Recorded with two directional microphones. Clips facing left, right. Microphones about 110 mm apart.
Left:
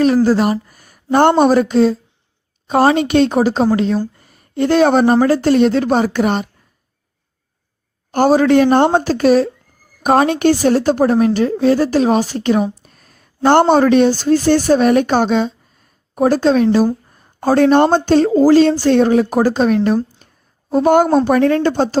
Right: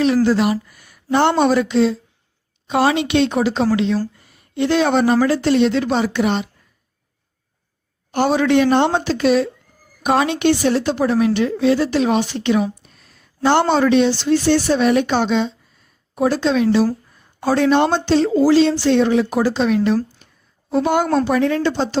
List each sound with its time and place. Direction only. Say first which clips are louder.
0.0 s speech: left 3 dB; 45° left (ahead or behind)
8.1 s speech: left 4 dB; 45° left (ahead or behind)
20.2 s a sound: left 2 dB; 45° left (ahead or behind)
20.7 s a woman's voice: left 5 dB; 45° left (ahead or behind)